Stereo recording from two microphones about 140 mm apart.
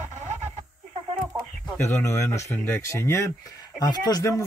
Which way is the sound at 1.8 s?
20° left (ahead or behind).